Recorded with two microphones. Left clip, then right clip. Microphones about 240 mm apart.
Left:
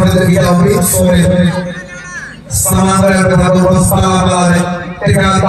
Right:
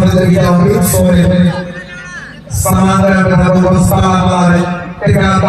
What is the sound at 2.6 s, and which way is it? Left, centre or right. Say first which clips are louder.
A man's voice: even; centre.